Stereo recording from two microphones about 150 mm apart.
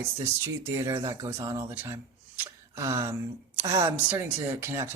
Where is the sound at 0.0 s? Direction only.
15° right (ahead or behind).